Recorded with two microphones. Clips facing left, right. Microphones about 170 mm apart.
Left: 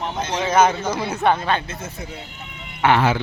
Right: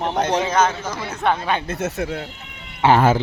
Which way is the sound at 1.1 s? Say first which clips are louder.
Left 1 dB; 5° left (ahead or behind).